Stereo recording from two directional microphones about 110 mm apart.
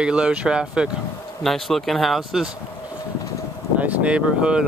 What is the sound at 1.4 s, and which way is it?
Speech, centre (ahead or behind).